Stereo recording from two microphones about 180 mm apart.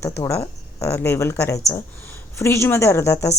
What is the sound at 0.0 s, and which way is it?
Speech, 15° left (ahead or behind).